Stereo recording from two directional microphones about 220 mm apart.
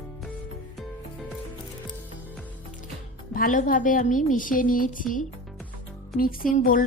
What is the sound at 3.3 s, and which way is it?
A woman's voice, 35° left (ahead or behind).